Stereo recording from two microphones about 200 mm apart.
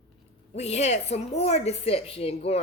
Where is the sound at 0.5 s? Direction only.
35° left (ahead or behind).